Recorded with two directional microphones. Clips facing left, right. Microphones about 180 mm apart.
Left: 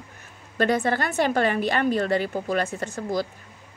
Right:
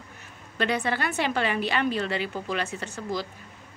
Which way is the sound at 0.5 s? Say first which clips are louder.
Left 4 dB; 45° left (ahead or behind).